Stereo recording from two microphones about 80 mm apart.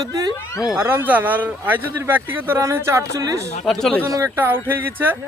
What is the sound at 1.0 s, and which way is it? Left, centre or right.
Speech, right.